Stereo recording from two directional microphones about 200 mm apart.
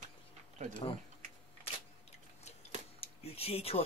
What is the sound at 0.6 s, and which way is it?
Speech, 35° right (ahead or behind).